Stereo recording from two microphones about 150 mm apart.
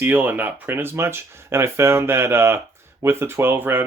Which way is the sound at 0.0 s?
10° right (ahead or behind).